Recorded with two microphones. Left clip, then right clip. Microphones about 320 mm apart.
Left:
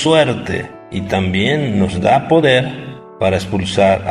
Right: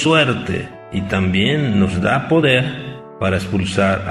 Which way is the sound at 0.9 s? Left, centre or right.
Left.